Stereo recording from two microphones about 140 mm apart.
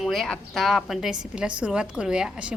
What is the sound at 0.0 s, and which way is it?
A woman's voice, centre (ahead or behind).